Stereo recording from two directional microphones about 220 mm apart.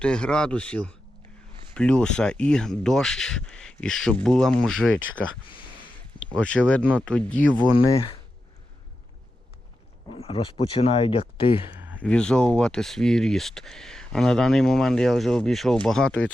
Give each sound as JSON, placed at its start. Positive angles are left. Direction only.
{"t": 0.0, "sound": "speech", "side_deg": 5}
{"t": 6.3, "sound": "speech", "side_deg": 5}
{"t": 10.2, "sound": "speech", "side_deg": 25}
{"t": 11.7, "sound": "a sound", "side_deg": -10}
{"t": 11.9, "sound": "speech", "side_deg": 5}